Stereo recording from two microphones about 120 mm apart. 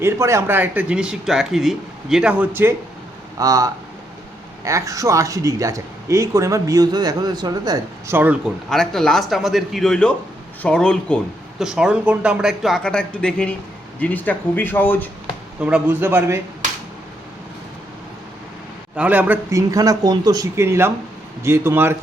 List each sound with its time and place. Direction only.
0.0 s speech: 25° right (ahead or behind)
3.3 s speech: 30° right (ahead or behind)
8.0 s speech: 15° right (ahead or behind)
8.7 s a man's voice: 5° left (ahead or behind)
11.6 s a man's voice: 5° right (ahead or behind); by 15.1 s 15° left (ahead or behind)
15.6 s speech: 15° right (ahead or behind)
18.9 s speech: 15° right (ahead or behind)
19.5 s speech: 30° right (ahead or behind)